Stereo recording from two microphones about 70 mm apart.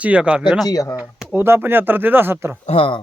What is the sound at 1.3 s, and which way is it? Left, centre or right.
Speech, right.